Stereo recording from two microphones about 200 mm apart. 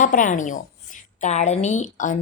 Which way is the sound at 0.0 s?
40° left (ahead or behind).